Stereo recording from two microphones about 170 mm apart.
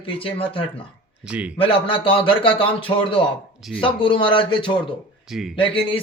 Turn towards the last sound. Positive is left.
turn(degrees=30)  # may be behind; listen again after turning